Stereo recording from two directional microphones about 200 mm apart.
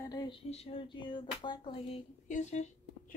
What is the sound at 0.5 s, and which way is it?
Speech, 30° left (ahead or behind).